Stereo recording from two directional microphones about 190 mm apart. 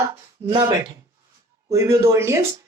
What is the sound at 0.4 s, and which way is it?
A woman's voice, 20° right (ahead or behind).